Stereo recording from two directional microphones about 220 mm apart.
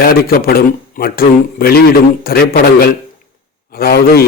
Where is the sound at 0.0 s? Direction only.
45° left (ahead or behind).